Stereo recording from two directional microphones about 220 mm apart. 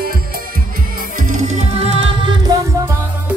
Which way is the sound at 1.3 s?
30° right (ahead or behind).